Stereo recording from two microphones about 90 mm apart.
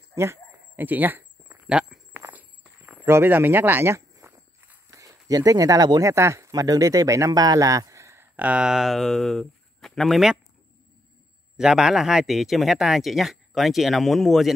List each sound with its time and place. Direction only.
0.1 s a sound: 30° right (ahead or behind)
1.7 s walk: 10° right (ahead or behind)
2.2 s walk: 20° right (ahead or behind)
5.0 s speech: 40° right (ahead or behind)
6.0 s speech: 30° right (ahead or behind)
8.4 s speech: 10° right (ahead or behind)
11.5 s speech: 5° right (ahead or behind)